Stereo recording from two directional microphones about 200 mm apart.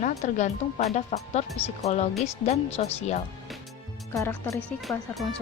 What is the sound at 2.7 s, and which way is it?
Speech, 30° left (ahead or behind).